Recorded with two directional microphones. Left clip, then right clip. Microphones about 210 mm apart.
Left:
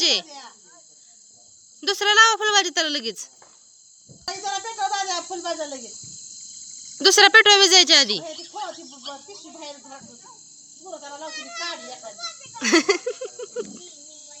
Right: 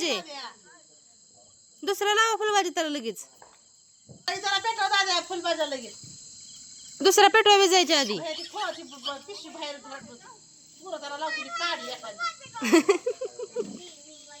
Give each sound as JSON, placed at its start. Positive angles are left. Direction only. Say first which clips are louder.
{"t": 0.2, "sound": "cricket", "louder": "left 3 dB", "side_deg": -30}
{"t": 1.8, "sound": "speech", "louder": "left 7 dB", "side_deg": 0}
{"t": 4.3, "sound": "speech", "louder": "right 2 dB", "side_deg": -25}
{"t": 7.0, "sound": "speech", "louder": "left 5 dB", "side_deg": 5}
{"t": 8.2, "sound": "speech", "louder": "right 1 dB", "side_deg": -25}
{"t": 12.4, "sound": "speech", "louder": "left 3 dB", "side_deg": 5}